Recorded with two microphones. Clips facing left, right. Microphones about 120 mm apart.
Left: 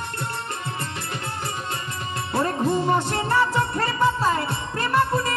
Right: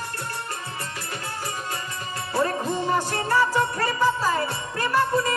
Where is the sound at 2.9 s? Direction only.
25° left (ahead or behind).